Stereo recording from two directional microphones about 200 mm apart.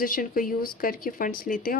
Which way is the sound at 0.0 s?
45° left (ahead or behind).